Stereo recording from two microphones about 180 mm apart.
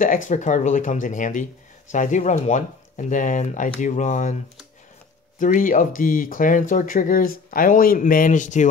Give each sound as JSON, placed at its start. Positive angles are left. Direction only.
{"t": 0.0, "sound": "speech", "side_deg": 45}
{"t": 5.4, "sound": "speech", "side_deg": 45}